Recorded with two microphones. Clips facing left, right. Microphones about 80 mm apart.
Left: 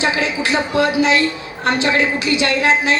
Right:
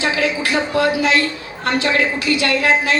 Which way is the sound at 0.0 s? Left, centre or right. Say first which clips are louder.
Even; left.